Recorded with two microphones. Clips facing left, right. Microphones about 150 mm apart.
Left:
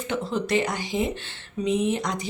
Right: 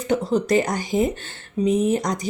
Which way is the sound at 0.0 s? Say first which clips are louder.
Right 6 dB; 40° right (ahead or behind).